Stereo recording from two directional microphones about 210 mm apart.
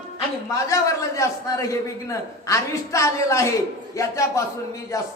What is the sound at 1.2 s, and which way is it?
A man's voice, 15° left (ahead or behind).